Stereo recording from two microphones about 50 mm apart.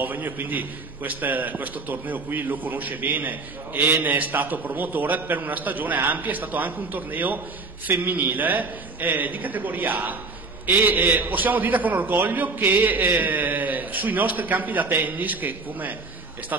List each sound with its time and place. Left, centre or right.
0.0 s a man's voice: right
11.1 s a man's voice: right